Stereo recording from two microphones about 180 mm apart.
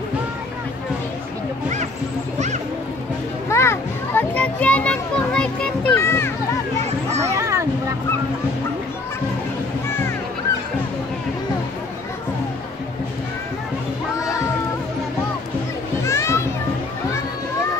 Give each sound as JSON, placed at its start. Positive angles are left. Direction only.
{"t": 3.4, "sound": "children playing", "side_deg": 15}
{"t": 7.3, "sound": "children playing", "side_deg": -15}
{"t": 16.0, "sound": "children playing", "side_deg": 15}